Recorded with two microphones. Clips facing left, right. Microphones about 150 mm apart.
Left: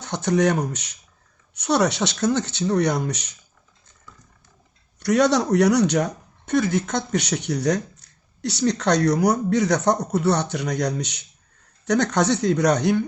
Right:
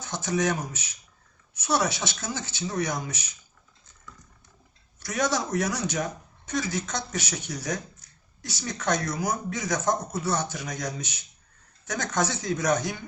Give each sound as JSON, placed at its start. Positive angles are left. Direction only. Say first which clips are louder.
{"t": 0.0, "sound": "speech", "louder": "left 7 dB", "side_deg": 65}
{"t": 4.9, "sound": "speech", "louder": "left 9 dB", "side_deg": 65}